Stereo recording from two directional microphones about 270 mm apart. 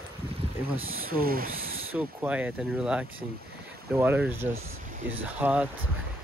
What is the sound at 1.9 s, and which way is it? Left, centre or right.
Speech, centre.